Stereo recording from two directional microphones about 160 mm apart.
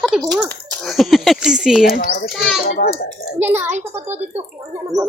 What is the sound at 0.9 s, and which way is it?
A man's voice, centre (ahead or behind).